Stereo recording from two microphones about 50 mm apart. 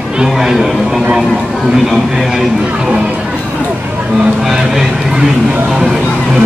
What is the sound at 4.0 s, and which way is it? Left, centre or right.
Speech, right.